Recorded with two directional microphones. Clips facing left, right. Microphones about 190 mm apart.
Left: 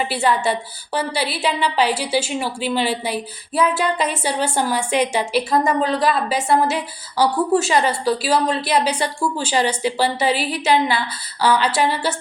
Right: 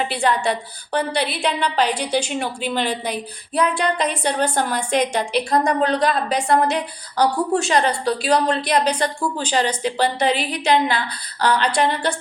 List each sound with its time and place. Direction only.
0.0 s a woman's voice: 5° left (ahead or behind)